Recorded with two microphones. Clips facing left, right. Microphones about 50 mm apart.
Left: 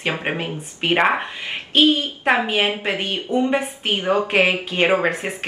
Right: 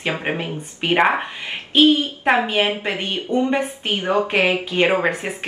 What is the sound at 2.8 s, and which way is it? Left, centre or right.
Speech, centre.